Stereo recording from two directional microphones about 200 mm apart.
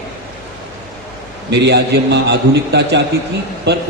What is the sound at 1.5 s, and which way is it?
A man's voice, 60° right (ahead or behind).